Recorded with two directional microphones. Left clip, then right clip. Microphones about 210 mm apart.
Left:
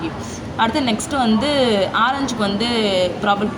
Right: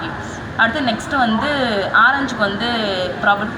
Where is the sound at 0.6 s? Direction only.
40° left (ahead or behind).